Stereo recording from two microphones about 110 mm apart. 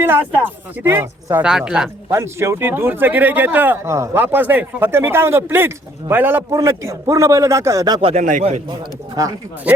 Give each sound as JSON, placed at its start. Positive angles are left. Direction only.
{"t": 0.0, "sound": "speech", "side_deg": -20}
{"t": 1.5, "sound": "speech", "side_deg": -5}
{"t": 2.0, "sound": "speech", "side_deg": -25}
{"t": 6.5, "sound": "speech", "side_deg": -30}
{"t": 8.0, "sound": "speech", "side_deg": -80}
{"t": 9.2, "sound": "speech", "side_deg": -35}